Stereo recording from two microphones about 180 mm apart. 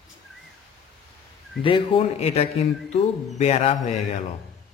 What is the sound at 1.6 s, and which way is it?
Speech, 30° left (ahead or behind).